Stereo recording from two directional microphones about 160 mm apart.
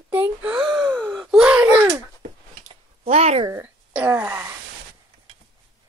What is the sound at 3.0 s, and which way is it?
Speech, 40° right (ahead or behind).